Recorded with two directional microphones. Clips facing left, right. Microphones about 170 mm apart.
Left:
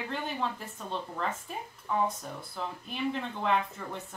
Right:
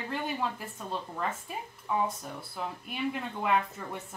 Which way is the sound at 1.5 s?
5° right (ahead or behind).